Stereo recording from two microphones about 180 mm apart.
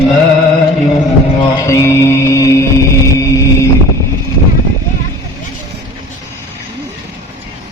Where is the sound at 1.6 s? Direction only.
15° left (ahead or behind).